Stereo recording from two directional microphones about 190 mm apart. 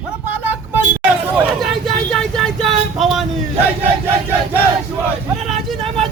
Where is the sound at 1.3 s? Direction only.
Centre (ahead or behind).